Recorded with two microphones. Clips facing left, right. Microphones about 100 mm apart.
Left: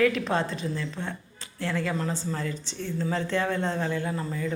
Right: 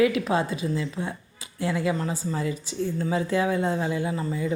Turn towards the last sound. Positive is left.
turn(degrees=-10)  # may be behind; listen again after turning